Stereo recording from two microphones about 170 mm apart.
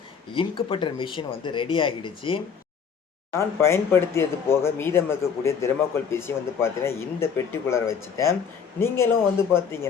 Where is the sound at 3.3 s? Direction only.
15° left (ahead or behind).